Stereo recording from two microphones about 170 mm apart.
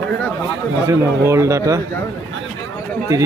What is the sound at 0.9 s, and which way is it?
Speech, 15° right (ahead or behind).